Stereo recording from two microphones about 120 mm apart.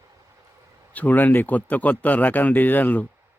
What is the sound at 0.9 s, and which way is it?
Speech, 15° left (ahead or behind).